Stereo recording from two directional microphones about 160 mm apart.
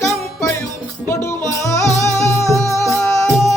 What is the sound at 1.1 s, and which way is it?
Music, 15° left (ahead or behind).